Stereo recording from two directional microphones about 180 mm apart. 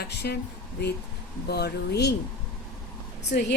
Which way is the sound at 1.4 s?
65° left (ahead or behind).